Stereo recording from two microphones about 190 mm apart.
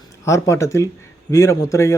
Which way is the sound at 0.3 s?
15° left (ahead or behind).